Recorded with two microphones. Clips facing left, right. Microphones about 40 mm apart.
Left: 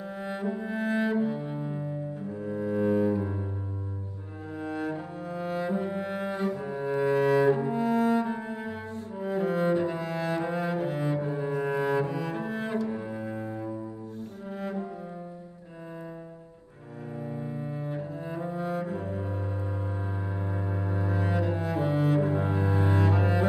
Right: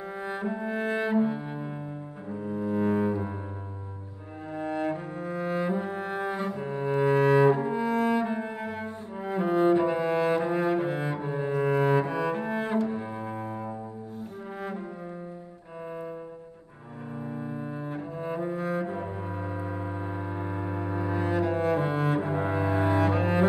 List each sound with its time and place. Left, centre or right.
0.1 s cello: centre
2.3 s double bass: centre
4.5 s music: centre
6.6 s cello: centre
11.1 s cello: right
13.3 s music: centre
14.6 s cello: centre
17.2 s double bass: centre
17.9 s cello: centre
21.4 s cello: centre